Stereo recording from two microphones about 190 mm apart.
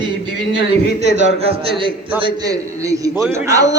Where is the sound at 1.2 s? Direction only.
35° right (ahead or behind).